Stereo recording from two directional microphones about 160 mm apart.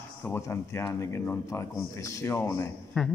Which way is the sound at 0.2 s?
15° left (ahead or behind).